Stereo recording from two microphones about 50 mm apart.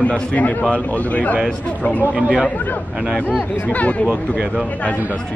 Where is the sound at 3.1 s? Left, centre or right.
Left.